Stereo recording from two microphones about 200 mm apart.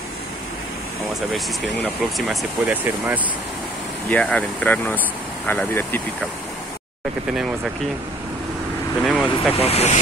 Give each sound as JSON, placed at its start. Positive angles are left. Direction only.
{"t": 2.1, "sound": "speech", "side_deg": -5}
{"t": 4.1, "sound": "speech", "side_deg": 5}
{"t": 9.0, "sound": "speech", "side_deg": 0}
{"t": 9.6, "sound": "speech", "side_deg": 30}